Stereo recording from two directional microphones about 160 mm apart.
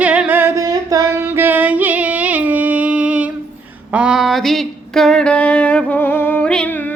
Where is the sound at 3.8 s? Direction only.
5° right (ahead or behind).